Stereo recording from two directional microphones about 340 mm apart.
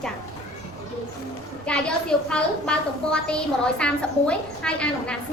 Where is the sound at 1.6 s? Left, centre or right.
Centre.